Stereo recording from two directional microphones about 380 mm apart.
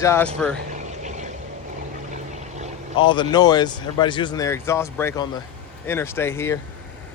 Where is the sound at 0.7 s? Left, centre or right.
Centre.